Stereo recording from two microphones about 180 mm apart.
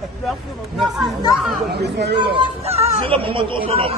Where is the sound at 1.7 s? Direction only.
70° right (ahead or behind).